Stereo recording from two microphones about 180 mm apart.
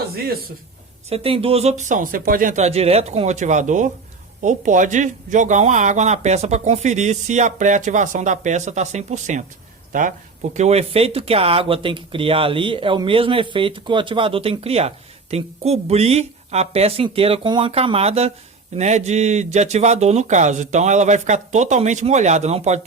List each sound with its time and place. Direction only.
0.1 s a man's voice: 55° right (ahead or behind)
1.1 s speech: 30° right (ahead or behind)